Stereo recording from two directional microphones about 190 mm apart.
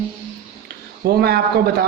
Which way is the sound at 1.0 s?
55° right (ahead or behind).